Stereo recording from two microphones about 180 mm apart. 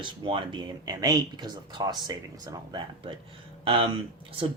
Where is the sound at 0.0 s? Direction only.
25° right (ahead or behind).